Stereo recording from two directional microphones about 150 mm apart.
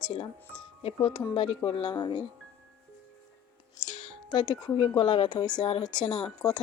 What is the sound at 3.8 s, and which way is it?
Music, 35° left (ahead or behind).